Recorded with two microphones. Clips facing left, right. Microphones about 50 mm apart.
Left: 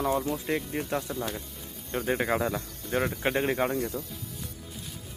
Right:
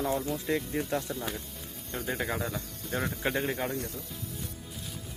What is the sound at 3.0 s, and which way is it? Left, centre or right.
Speech, left.